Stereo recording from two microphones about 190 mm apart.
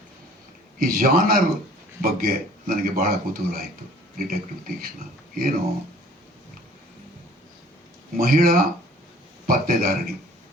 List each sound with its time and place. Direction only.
0.8 s a man's voice: 50° right (ahead or behind)
8.1 s a man's voice: 50° right (ahead or behind)